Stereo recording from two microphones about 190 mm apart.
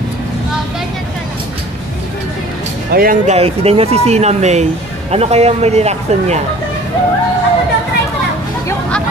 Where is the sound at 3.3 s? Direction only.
30° right (ahead or behind).